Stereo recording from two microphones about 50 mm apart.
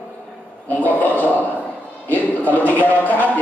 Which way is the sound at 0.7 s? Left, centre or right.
Left.